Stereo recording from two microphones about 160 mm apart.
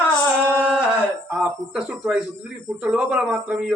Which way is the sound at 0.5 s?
5° right (ahead or behind).